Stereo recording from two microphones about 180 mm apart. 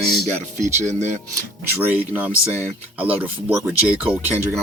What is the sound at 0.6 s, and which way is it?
Speech, 40° right (ahead or behind).